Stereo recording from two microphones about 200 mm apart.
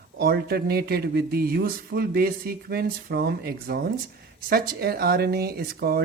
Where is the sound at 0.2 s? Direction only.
50° right (ahead or behind).